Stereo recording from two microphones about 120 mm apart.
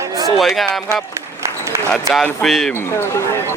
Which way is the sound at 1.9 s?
5° left (ahead or behind).